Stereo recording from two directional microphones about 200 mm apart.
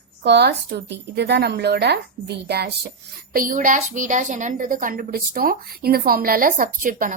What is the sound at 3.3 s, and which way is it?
A woman's voice, 45° right (ahead or behind).